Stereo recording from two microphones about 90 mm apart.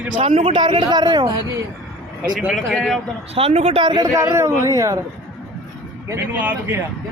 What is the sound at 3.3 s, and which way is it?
Speech, 90° right.